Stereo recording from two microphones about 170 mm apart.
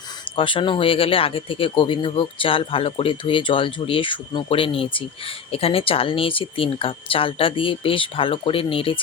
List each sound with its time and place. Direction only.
0.3 s speech: 30° left (ahead or behind)